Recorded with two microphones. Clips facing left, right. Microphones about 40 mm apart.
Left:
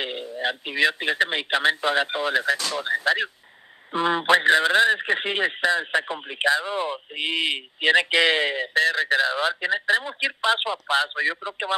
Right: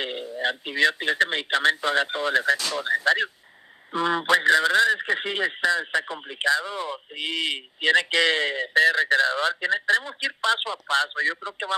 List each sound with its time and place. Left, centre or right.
0.0 s a sound: centre
0.4 s a man's voice: centre
3.9 s speech: left
8.7 s a man's voice: centre